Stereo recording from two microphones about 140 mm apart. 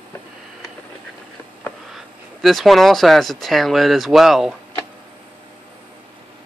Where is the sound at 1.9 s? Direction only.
Centre (ahead or behind).